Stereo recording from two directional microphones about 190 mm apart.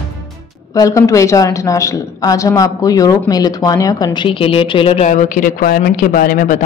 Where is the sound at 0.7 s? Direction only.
15° left (ahead or behind).